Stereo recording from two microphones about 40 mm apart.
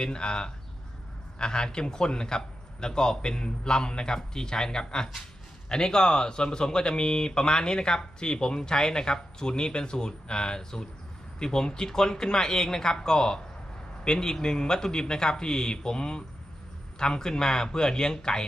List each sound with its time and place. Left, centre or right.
0.0 s speech: left